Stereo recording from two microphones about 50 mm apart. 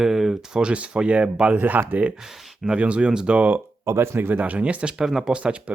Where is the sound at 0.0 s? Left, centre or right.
Centre.